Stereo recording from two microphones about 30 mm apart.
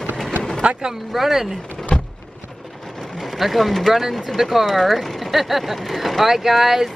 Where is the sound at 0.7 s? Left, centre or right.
Right.